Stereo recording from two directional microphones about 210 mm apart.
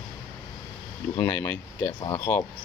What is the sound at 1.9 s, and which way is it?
Speech, 20° left (ahead or behind).